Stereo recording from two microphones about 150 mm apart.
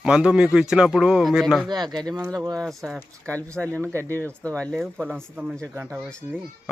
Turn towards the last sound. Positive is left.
turn(degrees=-5)  # may be behind; listen again after turning